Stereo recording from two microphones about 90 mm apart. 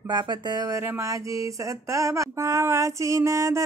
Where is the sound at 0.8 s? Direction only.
30° right (ahead or behind).